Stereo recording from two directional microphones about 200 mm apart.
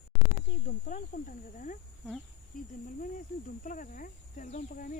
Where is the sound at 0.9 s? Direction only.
40° left (ahead or behind).